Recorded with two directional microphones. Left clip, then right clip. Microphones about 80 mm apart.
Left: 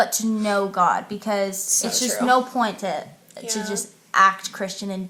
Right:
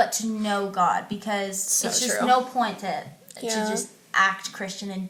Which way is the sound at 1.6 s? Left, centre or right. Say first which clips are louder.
Left 2 dB; centre.